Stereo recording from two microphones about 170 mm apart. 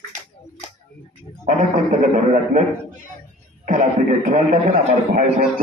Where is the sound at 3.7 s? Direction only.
50° right (ahead or behind).